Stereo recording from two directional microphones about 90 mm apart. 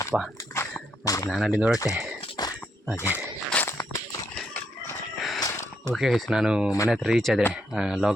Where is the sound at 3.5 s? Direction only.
25° left (ahead or behind).